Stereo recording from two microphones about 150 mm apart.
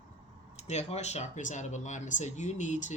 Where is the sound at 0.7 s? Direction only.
50° left (ahead or behind).